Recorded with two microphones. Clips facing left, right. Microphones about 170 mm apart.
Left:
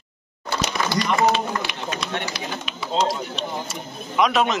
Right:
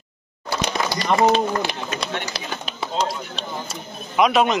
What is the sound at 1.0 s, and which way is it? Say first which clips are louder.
Run: right 3 dB; 35° right (ahead or behind).